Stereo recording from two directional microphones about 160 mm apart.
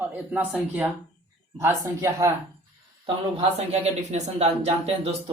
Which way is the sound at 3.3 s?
40° right (ahead or behind).